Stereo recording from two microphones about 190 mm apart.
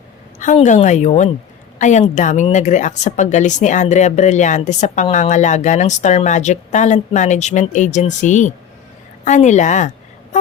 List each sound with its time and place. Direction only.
0.3 s a woman's voice: 40° left (ahead or behind)